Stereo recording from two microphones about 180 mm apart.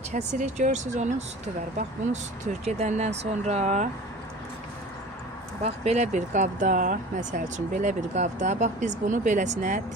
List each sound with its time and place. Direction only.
0.1 s speech: 40° right (ahead or behind)
2.4 s speech: 40° right (ahead or behind)
5.6 s speech: 40° right (ahead or behind)